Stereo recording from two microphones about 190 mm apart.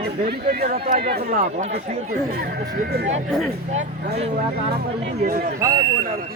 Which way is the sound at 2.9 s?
60° right (ahead or behind).